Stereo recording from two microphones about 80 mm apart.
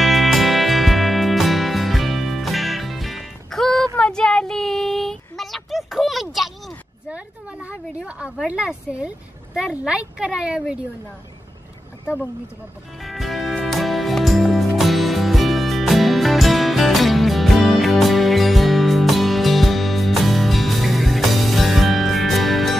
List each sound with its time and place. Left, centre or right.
0.0 s music: centre
3.9 s child singing: centre
7.1 s a sound: centre
8.5 s a woman's voice: centre
13.0 s music: centre